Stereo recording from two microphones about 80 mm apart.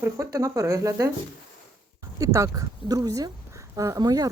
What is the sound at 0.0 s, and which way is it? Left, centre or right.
Speech, right.